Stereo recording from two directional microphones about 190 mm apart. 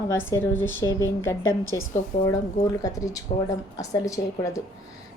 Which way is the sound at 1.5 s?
90° left.